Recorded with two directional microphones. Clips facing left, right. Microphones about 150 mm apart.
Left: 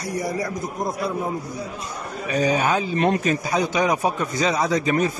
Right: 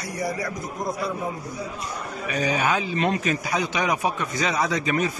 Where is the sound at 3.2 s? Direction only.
35° left (ahead or behind).